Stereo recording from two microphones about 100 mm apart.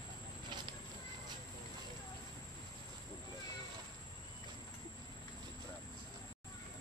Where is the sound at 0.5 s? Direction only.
50° right (ahead or behind).